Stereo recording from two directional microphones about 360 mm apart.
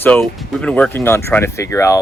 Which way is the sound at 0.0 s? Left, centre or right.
Centre.